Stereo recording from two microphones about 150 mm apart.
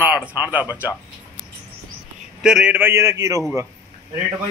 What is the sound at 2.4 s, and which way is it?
A man's voice, 5° right (ahead or behind).